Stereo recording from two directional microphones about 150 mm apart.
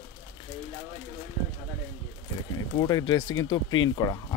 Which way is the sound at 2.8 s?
25° left (ahead or behind).